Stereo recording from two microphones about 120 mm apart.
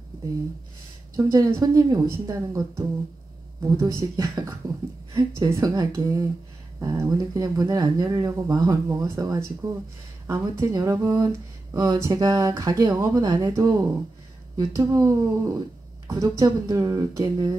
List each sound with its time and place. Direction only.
1.1 s speech: 30° right (ahead or behind)